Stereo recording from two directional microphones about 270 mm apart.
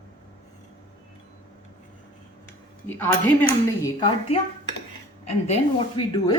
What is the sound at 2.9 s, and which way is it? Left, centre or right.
A woman's voice, centre.